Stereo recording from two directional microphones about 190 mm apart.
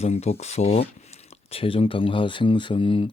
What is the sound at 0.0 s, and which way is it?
Speech, 35° left (ahead or behind).